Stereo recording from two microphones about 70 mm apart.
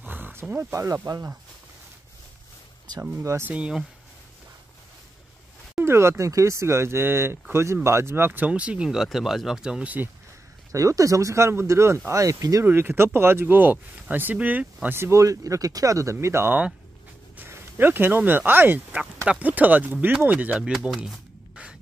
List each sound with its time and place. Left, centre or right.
0.0 s roaring cats: right
0.6 s speech: right
1.1 s speech: right
3.2 s speech: right
3.4 s speech: centre
5.9 s speech: right
8.5 s speech: centre
10.7 s speech: right
12.6 s speech: right
15.0 s speech: right
17.4 s speech: right
20.6 s speech: centre